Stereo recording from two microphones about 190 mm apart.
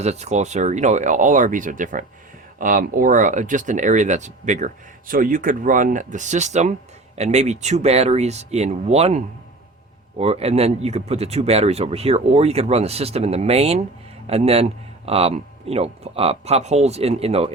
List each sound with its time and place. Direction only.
0.0 s speech: 35° right (ahead or behind)